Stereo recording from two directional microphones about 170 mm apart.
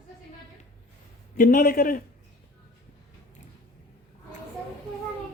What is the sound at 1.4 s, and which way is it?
Speech, 55° left (ahead or behind).